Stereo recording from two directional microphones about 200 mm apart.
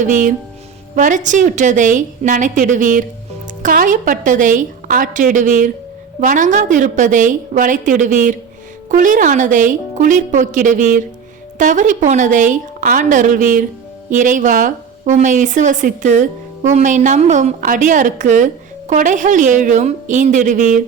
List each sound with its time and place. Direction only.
0.0 s a woman's voice: 40° right (ahead or behind)